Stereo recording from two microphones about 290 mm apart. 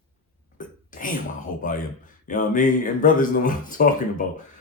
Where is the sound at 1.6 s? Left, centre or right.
Left.